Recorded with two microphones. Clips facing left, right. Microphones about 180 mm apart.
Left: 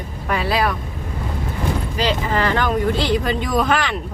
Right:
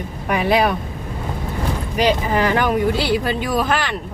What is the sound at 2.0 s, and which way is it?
Speech, 15° right (ahead or behind).